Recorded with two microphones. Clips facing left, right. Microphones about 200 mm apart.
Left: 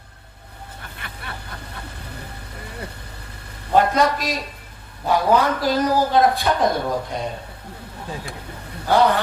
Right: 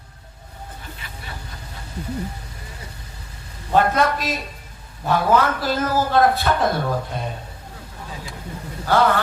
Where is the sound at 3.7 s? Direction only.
15° left (ahead or behind).